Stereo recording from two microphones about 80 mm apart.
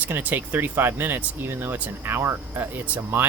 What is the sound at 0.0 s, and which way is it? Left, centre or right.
Speech, right.